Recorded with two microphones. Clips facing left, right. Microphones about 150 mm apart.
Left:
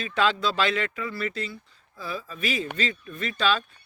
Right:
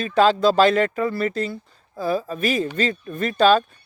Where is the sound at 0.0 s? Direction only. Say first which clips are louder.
Right 8 dB; 40° right (ahead or behind).